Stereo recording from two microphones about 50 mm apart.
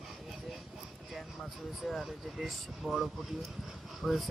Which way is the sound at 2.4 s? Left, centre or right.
Centre.